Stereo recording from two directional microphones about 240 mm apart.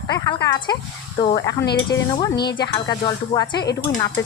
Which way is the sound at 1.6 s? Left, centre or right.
Left.